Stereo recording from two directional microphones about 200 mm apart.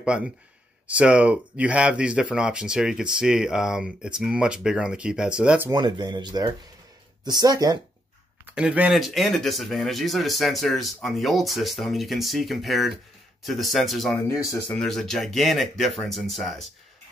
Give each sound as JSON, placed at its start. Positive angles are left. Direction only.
{"t": 0.0, "sound": "speech", "side_deg": -5}
{"t": 5.7, "sound": "speech", "side_deg": -20}
{"t": 8.5, "sound": "speech", "side_deg": -5}
{"t": 14.2, "sound": "speech", "side_deg": 15}
{"t": 14.7, "sound": "speech", "side_deg": 0}